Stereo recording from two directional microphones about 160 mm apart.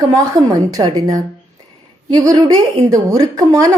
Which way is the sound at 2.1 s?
20° right (ahead or behind).